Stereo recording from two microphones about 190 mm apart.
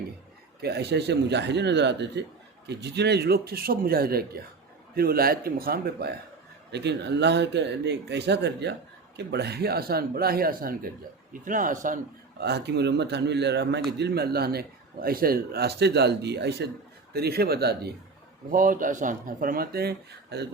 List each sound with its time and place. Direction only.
0.6 s speech: 60° right (ahead or behind); by 11.9 s 45° right (ahead or behind)
12.4 s speech: 60° right (ahead or behind)
18.5 s speech: 45° right (ahead or behind)